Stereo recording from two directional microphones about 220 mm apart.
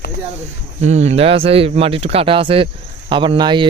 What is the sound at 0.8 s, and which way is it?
Speech, 30° right (ahead or behind).